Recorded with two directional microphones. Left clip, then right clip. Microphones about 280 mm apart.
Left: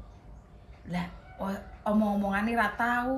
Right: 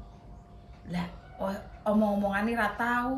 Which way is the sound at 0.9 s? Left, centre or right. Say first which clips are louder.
Left 1 dB; centre.